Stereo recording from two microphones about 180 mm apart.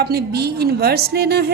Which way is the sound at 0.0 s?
65° right (ahead or behind).